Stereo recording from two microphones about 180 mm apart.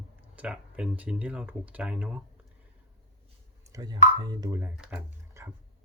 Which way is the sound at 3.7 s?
20° right (ahead or behind).